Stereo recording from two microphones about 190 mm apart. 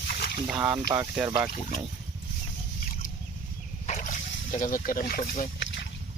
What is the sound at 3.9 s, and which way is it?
Splash, 35° left (ahead or behind).